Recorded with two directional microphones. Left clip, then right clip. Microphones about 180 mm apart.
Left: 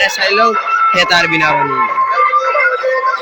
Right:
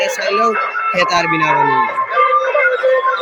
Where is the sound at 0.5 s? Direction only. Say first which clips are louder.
Left 5 dB; 50° right (ahead or behind).